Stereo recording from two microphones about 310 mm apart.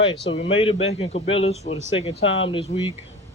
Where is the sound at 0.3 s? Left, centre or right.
Centre.